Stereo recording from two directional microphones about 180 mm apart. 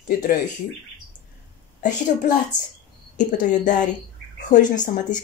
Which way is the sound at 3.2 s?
45° left (ahead or behind).